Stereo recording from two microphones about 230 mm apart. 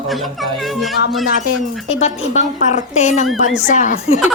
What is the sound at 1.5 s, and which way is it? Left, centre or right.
Speech, left.